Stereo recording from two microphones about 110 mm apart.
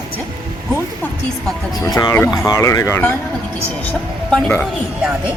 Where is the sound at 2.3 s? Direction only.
35° left (ahead or behind).